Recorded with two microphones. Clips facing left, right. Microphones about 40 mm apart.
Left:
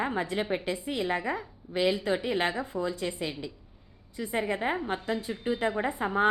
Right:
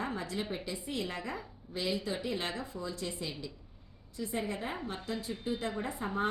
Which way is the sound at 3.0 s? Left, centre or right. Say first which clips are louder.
Left 6 dB; left.